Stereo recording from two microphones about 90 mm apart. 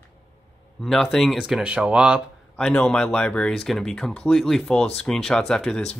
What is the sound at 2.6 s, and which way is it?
Speech, 10° left (ahead or behind).